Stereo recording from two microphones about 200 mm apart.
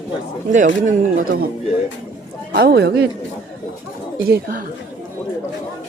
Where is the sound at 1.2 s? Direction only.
50° right (ahead or behind).